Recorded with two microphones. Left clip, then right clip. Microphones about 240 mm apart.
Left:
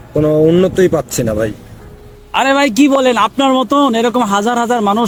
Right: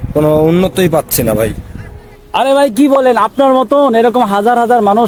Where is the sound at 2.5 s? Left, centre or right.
Left.